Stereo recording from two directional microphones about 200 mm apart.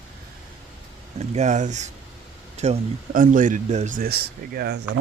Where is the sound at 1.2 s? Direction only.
35° right (ahead or behind).